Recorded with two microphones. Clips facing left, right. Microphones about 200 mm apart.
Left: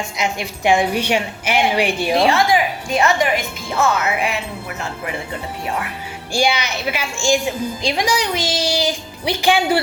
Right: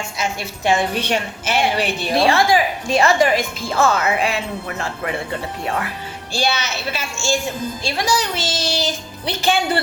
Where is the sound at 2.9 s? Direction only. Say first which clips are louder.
Right 2 dB; 30° right (ahead or behind).